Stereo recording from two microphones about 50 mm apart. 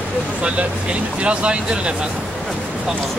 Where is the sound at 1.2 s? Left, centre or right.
Right.